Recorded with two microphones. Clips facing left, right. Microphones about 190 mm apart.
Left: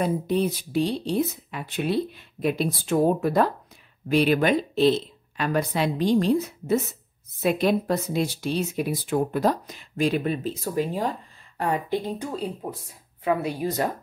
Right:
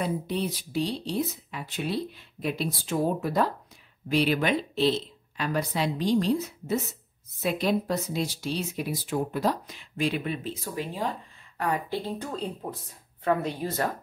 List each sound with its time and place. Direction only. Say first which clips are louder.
0.0 s speech: left 5 dB; 45° left (ahead or behind)
11.5 s speech: left 3 dB; 25° left (ahead or behind)